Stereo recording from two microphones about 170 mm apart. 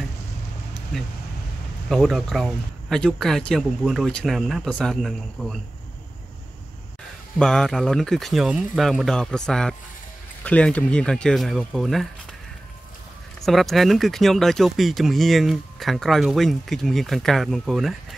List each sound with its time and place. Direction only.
1.9 s speech: centre (ahead or behind)
7.3 s speech: 5° left (ahead or behind)
13.5 s speech: centre (ahead or behind)